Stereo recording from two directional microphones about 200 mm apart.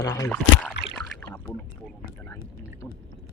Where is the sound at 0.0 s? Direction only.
15° left (ahead or behind).